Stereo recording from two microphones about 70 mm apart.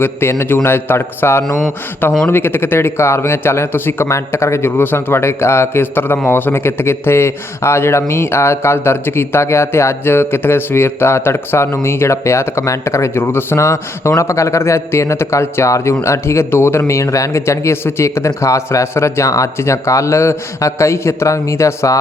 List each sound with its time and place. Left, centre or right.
0.0 s speech: left